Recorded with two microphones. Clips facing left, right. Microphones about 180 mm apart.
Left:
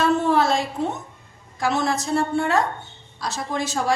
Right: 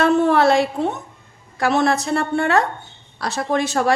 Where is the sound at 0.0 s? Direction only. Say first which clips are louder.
Right 4 dB; 65° right (ahead or behind).